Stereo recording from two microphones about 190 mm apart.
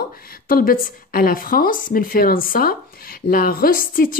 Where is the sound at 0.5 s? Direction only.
50° left (ahead or behind).